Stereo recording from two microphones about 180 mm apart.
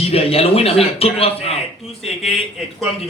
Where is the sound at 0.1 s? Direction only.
35° left (ahead or behind).